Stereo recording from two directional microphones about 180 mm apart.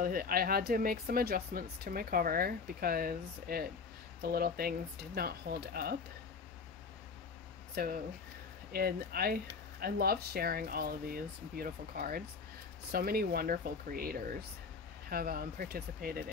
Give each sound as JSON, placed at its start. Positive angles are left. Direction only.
{"t": 0.0, "sound": "speech", "side_deg": -55}
{"t": 7.8, "sound": "speech", "side_deg": -55}